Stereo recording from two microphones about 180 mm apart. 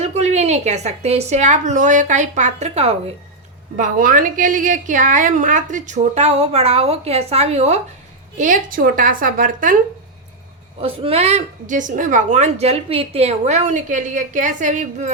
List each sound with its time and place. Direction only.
0.0 s a woman's voice: 35° right (ahead or behind)
3.8 s a woman's voice: 45° right (ahead or behind)
8.4 s a woman's voice: 50° right (ahead or behind)
10.8 s a woman's voice: 30° right (ahead or behind)